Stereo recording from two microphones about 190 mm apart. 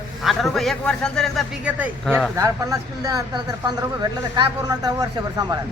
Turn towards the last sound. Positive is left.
turn(degrees=-20)  # may be behind; listen again after turning